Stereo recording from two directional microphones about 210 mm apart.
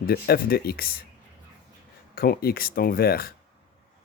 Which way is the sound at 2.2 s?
45° left (ahead or behind).